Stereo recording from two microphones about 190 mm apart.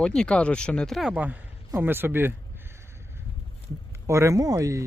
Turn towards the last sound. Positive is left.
turn(degrees=-15)  # may be behind; listen again after turning